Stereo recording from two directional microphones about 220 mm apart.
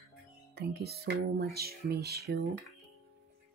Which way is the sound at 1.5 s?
45° right (ahead or behind).